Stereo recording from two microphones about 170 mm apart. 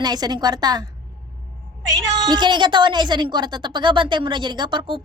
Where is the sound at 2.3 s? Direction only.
25° right (ahead or behind).